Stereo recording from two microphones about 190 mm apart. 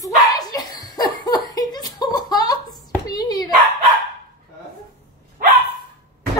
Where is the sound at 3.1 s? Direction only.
20° left (ahead or behind).